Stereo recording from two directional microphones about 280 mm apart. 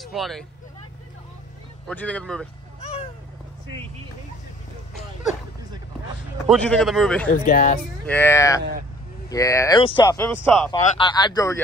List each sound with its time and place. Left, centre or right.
0.0 s speech: centre
1.9 s speech: centre
2.8 s a sound: left
6.5 s speech: centre
7.2 s speech: left
8.1 s speech: centre
10.7 s speech: centre